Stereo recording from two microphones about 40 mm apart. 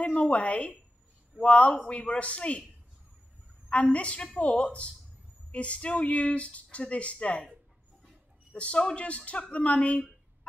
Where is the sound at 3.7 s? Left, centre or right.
Left.